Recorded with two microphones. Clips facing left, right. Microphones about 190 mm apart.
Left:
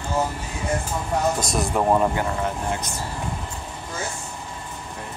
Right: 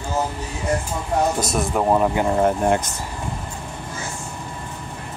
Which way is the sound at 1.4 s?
5° right (ahead or behind).